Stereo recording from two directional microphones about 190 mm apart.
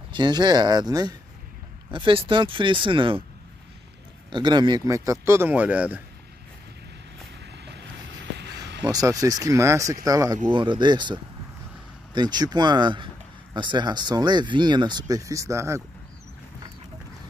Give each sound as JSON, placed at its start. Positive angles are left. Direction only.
{"t": 0.1, "sound": "speech", "side_deg": -20}
{"t": 4.3, "sound": "a man's voice", "side_deg": -25}
{"t": 7.4, "sound": "vehicle", "side_deg": -65}
{"t": 8.8, "sound": "a man's voice", "side_deg": -20}